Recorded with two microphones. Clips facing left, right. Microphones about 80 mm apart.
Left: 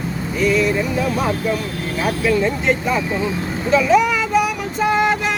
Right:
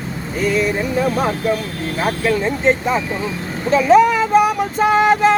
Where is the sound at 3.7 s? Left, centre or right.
Right.